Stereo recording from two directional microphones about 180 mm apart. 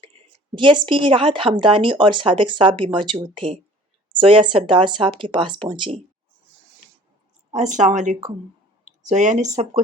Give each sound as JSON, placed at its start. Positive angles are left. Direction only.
{"t": 0.0, "sound": "a woman's voice", "side_deg": -30}
{"t": 7.5, "sound": "speech", "side_deg": -40}